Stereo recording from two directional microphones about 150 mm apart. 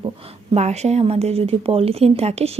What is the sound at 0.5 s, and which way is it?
Speech, 45° right (ahead or behind).